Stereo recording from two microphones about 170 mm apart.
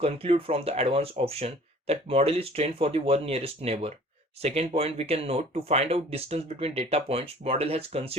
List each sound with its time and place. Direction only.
0.0 s speech: 35° right (ahead or behind)